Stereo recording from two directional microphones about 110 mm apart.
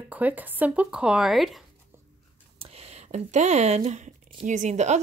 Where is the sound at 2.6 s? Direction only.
65° right (ahead or behind).